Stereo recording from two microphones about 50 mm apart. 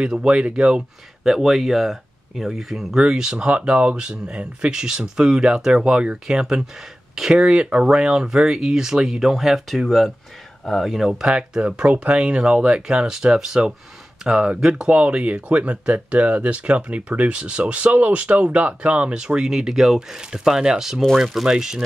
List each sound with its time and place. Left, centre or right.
0.0 s speech: centre
1.2 s speech: centre